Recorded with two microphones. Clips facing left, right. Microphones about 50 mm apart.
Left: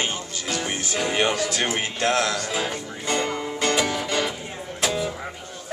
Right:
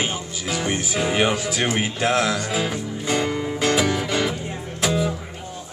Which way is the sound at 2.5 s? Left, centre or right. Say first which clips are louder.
Right 3 dB; centre.